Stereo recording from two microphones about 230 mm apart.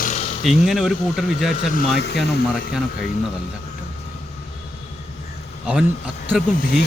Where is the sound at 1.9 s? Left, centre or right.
Left.